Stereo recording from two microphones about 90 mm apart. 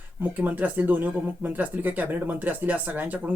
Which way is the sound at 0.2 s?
20° right (ahead or behind).